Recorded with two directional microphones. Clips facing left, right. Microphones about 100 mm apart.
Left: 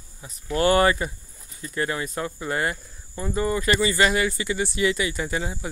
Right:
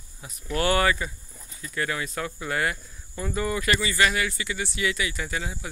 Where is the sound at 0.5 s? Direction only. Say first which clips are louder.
Left 4 dB; 35° left (ahead or behind).